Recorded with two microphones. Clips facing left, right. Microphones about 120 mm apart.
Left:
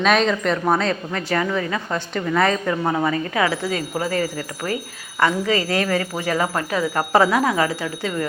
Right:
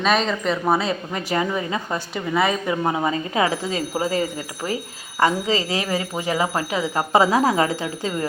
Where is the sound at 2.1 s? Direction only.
10° right (ahead or behind).